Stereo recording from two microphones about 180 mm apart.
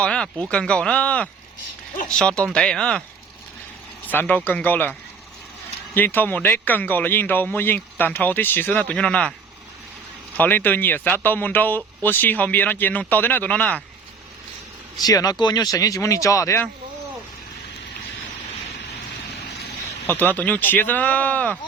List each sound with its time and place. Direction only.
0.0 s speech: 5° left (ahead or behind)
4.0 s a man's voice: 10° left (ahead or behind)
10.3 s a man's voice: 10° left (ahead or behind)
14.9 s speech: 20° left (ahead or behind)
20.1 s a man's voice: 10° left (ahead or behind)